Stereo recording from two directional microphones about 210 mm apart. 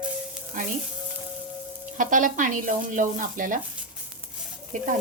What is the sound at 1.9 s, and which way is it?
Speech, 40° right (ahead or behind).